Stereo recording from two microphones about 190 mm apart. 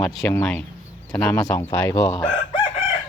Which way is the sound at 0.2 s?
10° left (ahead or behind).